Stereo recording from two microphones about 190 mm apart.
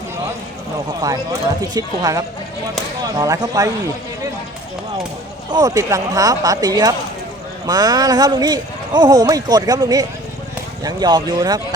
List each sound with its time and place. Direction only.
1.0 s speech: 20° right (ahead or behind)
5.5 s speech: 20° right (ahead or behind)